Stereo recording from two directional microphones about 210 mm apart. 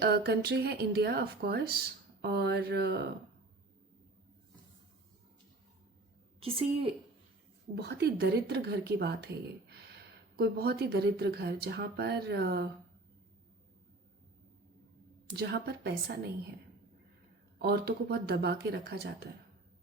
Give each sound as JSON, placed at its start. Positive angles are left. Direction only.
{"t": 0.0, "sound": "speech", "side_deg": -50}
{"t": 6.4, "sound": "a woman's voice", "side_deg": -25}
{"t": 7.8, "sound": "speech", "side_deg": -50}
{"t": 15.3, "sound": "speech", "side_deg": -50}
{"t": 17.6, "sound": "speech", "side_deg": -50}